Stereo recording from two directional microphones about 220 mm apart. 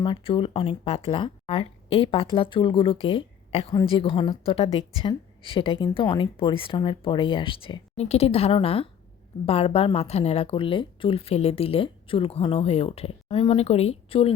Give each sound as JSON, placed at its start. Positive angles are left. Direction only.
{"t": 0.0, "sound": "speech", "side_deg": 20}